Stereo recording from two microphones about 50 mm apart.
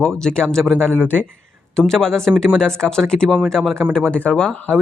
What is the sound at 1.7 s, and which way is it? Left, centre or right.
Speech, centre.